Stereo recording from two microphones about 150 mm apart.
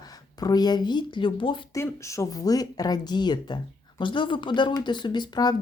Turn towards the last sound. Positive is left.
turn(degrees=30)  # may be behind; listen again after turning